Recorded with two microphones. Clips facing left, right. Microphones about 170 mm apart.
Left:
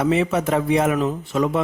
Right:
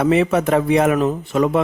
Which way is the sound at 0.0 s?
65° right (ahead or behind).